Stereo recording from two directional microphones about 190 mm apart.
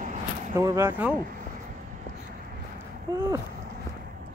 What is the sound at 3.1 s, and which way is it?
Speech, 20° right (ahead or behind).